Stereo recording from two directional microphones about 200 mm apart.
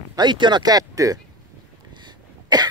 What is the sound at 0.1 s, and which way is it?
Speech, 20° right (ahead or behind).